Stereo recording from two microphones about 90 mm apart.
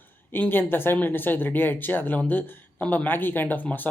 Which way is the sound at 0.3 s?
20° left (ahead or behind).